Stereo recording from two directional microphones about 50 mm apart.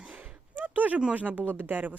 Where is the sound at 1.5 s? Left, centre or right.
Right.